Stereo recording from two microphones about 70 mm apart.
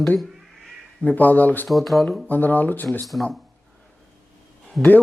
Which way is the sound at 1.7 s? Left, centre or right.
Centre.